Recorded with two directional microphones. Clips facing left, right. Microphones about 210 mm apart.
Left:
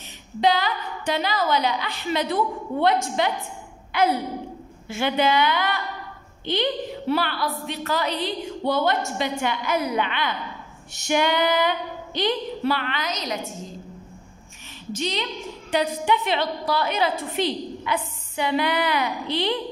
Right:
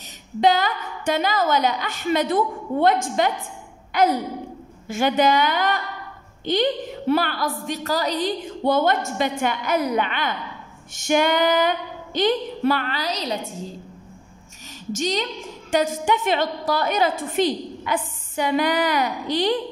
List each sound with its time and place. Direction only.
0.4 s a woman's voice: 45° right (ahead or behind); by 13.7 s 30° right (ahead or behind)
14.9 s a woman's voice: 45° right (ahead or behind)